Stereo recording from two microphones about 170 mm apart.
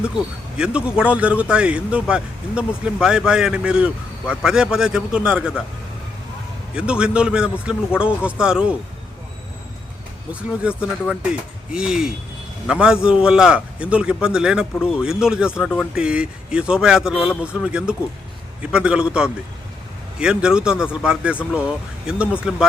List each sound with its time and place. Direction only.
0.5 s speech: 5° right (ahead or behind)
6.7 s speech: 5° right (ahead or behind)
10.6 s speech: 5° right (ahead or behind)